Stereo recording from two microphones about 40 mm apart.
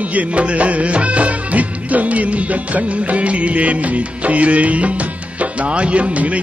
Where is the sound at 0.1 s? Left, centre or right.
Right.